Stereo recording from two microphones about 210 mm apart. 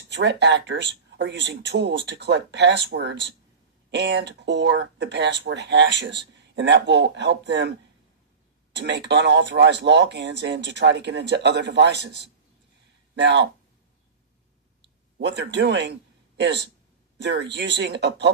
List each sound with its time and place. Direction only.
0.1 s speech: 55° right (ahead or behind)
8.7 s speech: 55° right (ahead or behind)
15.2 s speech: 55° right (ahead or behind)